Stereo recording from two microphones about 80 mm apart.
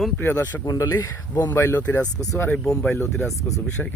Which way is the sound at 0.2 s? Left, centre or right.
Left.